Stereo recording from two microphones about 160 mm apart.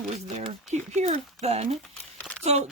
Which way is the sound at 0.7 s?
45° right (ahead or behind).